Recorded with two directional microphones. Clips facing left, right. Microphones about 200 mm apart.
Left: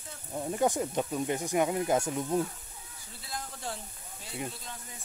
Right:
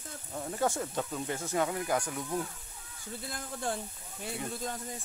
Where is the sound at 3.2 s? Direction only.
55° right (ahead or behind).